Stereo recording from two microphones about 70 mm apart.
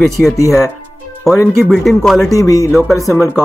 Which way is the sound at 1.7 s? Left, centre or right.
Centre.